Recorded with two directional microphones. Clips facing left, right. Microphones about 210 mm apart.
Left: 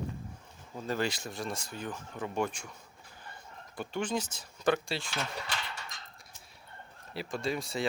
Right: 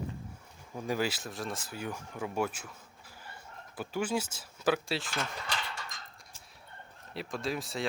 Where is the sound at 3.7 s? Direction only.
5° right (ahead or behind).